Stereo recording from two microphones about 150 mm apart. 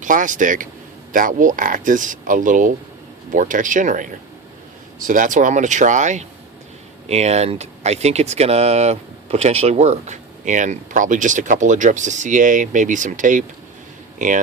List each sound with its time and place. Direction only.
0.0 s speech: 60° right (ahead or behind)